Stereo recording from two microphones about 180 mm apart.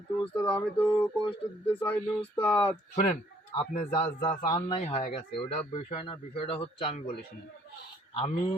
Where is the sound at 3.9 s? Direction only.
25° left (ahead or behind).